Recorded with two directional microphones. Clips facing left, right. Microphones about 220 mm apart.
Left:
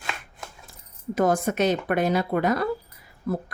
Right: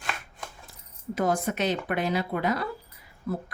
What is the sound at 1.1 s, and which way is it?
Speech, 50° left (ahead or behind).